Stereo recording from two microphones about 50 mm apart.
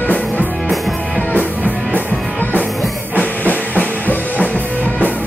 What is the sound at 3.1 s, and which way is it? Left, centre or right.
Drum kit, left.